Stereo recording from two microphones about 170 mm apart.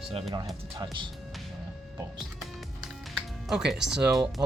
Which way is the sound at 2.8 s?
5° right (ahead or behind).